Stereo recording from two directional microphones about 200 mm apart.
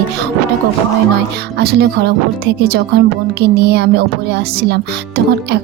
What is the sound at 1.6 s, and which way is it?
Speech, 55° right (ahead or behind).